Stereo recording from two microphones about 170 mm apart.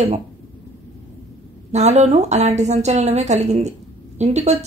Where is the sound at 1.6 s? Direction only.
40° right (ahead or behind).